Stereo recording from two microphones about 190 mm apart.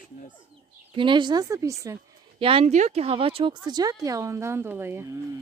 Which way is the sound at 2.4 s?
30° right (ahead or behind).